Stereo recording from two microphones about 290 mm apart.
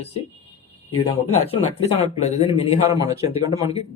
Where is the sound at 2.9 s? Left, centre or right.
Centre.